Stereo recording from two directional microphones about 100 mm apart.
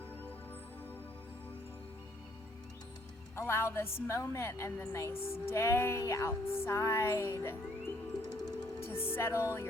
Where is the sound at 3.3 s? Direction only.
25° left (ahead or behind).